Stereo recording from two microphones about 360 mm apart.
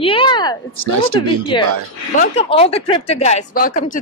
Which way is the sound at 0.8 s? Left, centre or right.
Right.